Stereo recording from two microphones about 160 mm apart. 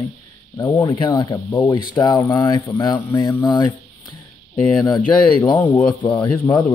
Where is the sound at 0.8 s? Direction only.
30° left (ahead or behind).